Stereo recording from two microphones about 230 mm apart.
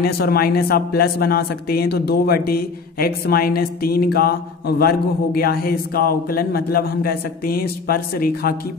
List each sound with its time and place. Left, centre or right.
0.0 s speech: left